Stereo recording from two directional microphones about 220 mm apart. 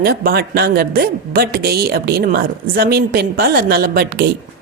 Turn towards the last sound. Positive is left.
turn(degrees=-45)  # may be behind; listen again after turning